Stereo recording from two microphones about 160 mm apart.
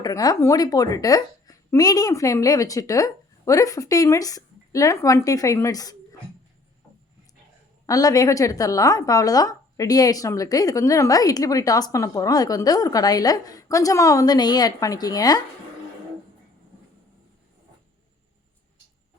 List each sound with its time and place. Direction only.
0.0 s a woman's voice: 25° left (ahead or behind)
7.9 s a woman's voice: 20° left (ahead or behind)